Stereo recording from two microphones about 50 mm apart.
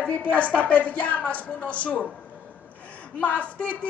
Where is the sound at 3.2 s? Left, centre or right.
Left.